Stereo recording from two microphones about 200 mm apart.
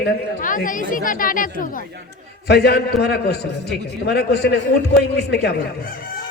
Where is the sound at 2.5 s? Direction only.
55° left (ahead or behind).